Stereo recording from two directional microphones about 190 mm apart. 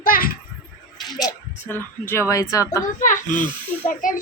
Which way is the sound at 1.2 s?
10° left (ahead or behind).